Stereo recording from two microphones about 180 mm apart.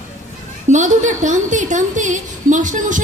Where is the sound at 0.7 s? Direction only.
45° right (ahead or behind).